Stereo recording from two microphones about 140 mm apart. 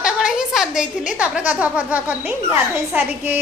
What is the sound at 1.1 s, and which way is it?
A woman's voice, 10° right (ahead or behind).